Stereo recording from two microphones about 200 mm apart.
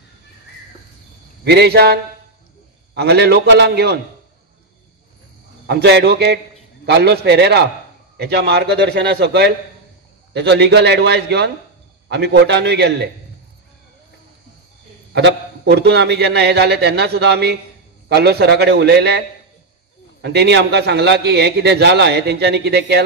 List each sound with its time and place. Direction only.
1.4 s a man's voice: 55° right (ahead or behind)
5.7 s a man's voice: 55° right (ahead or behind)
15.1 s a man's voice: 55° right (ahead or behind)